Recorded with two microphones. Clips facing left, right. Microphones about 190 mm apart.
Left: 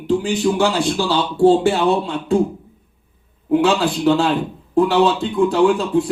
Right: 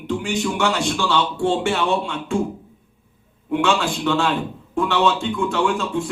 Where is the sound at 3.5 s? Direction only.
35° left (ahead or behind).